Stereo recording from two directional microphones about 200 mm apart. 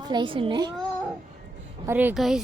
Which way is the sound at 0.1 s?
25° right (ahead or behind).